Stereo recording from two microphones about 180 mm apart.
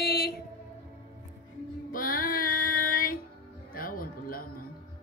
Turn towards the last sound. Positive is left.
turn(degrees=55)  # may be behind; listen again after turning